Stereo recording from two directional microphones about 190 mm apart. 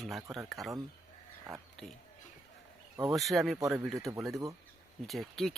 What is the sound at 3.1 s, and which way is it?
Speech, centre (ahead or behind).